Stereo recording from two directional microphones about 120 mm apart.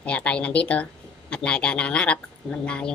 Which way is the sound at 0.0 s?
10° left (ahead or behind).